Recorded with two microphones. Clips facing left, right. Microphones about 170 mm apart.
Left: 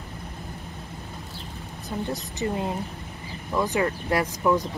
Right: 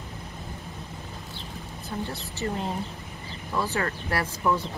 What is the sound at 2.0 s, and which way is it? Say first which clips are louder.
Speech: left 6 dB; 15° left (ahead or behind).